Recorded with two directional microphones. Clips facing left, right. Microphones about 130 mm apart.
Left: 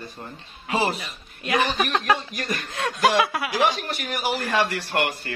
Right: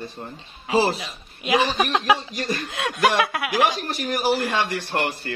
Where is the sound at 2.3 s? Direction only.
30° right (ahead or behind).